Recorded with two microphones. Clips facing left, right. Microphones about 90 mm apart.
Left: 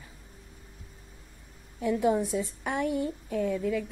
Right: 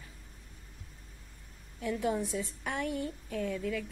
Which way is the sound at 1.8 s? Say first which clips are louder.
Left 6 dB; 15° left (ahead or behind).